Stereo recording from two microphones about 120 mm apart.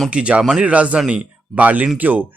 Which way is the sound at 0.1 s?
10° right (ahead or behind).